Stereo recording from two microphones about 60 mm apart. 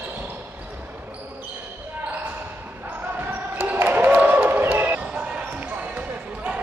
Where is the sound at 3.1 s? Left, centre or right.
Right.